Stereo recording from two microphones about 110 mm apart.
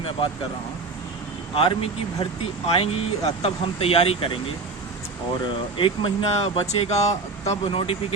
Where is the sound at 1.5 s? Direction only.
60° left (ahead or behind).